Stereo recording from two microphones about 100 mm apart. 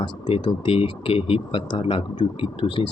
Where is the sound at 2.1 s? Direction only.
55° left (ahead or behind).